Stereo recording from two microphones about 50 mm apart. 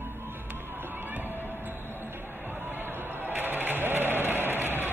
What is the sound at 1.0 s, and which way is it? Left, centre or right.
Music, right.